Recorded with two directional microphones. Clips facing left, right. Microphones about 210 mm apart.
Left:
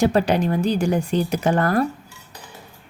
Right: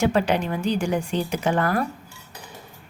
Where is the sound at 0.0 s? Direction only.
35° left (ahead or behind).